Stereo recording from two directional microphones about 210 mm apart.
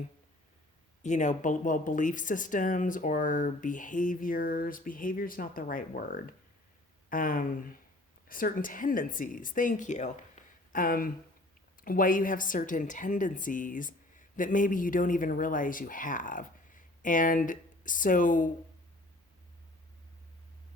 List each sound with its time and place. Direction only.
1.0 s speech: 35° left (ahead or behind)